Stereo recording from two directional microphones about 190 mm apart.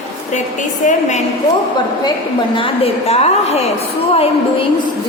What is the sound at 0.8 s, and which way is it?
Speech, 35° left (ahead or behind).